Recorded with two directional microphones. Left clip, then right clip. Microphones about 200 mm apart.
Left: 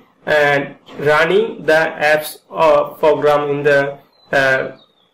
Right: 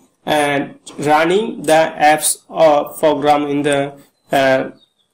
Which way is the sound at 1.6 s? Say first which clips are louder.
Right 4 dB; 45° right (ahead or behind).